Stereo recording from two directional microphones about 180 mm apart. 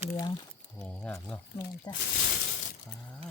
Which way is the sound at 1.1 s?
10° left (ahead or behind).